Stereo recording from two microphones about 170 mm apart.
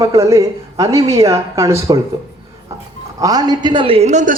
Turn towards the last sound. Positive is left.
turn(degrees=-45)  # may be behind; listen again after turning